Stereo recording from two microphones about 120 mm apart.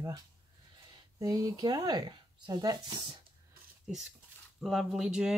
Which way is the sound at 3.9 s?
10° right (ahead or behind).